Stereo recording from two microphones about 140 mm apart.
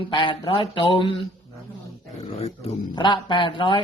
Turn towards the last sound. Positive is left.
turn(degrees=35)  # may be behind; listen again after turning